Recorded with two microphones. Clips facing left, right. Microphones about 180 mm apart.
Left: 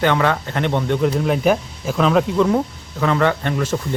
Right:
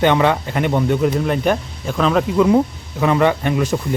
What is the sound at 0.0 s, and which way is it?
Speech, 20° right (ahead or behind).